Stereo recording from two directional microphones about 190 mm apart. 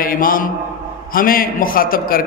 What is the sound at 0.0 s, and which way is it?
A man's voice, 50° left (ahead or behind).